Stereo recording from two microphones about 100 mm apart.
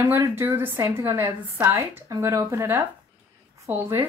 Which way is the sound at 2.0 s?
35° right (ahead or behind).